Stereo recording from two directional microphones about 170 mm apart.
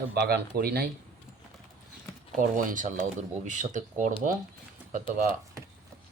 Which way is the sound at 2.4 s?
50° right (ahead or behind).